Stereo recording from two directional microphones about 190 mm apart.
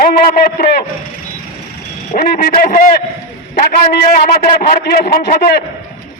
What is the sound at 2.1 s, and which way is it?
A man's voice, 55° left (ahead or behind).